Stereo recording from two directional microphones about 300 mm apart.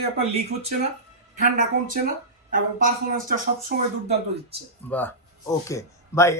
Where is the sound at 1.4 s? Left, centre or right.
Right.